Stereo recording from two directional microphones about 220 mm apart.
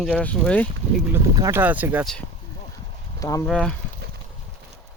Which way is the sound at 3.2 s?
15° left (ahead or behind).